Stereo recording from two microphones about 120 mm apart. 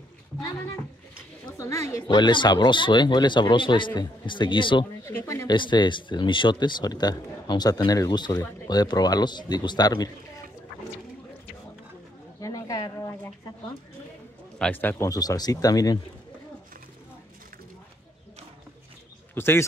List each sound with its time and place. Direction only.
1.6 s speech: 25° left (ahead or behind)
2.0 s speech: 40° left (ahead or behind)
5.0 s speech: 25° left (ahead or behind)
5.5 s speech: 40° left (ahead or behind)
12.4 s a sound: 30° left (ahead or behind)
14.6 s speech: 15° left (ahead or behind)
15.0 s speech: 30° left (ahead or behind)
19.3 s speech: 20° left (ahead or behind)